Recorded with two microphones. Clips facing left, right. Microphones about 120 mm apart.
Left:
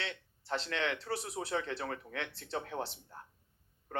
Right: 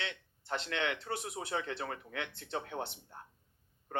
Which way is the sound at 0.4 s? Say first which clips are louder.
Even; 35° left (ahead or behind).